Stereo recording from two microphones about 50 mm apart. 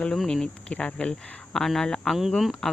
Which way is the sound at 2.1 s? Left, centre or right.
Centre.